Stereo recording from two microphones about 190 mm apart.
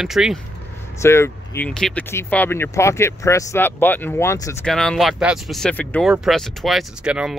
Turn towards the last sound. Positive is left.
turn(degrees=-5)  # may be behind; listen again after turning